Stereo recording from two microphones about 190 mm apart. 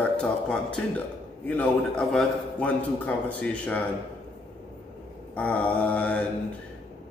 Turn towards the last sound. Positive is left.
turn(degrees=5)  # may be behind; listen again after turning